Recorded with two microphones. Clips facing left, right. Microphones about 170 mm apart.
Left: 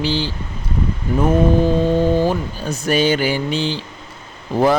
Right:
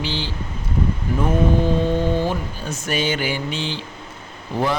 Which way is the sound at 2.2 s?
35° left (ahead or behind).